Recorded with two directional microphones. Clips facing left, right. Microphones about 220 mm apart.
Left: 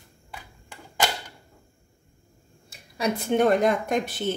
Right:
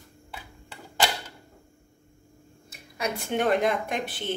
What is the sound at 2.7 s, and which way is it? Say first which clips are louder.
Speech: left 4 dB; 35° left (ahead or behind).